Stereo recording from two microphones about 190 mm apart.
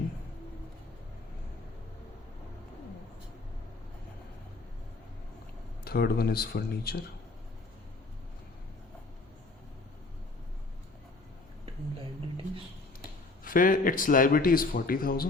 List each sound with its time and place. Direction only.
5.8 s speech: 55° left (ahead or behind)
13.4 s speech: 45° left (ahead or behind)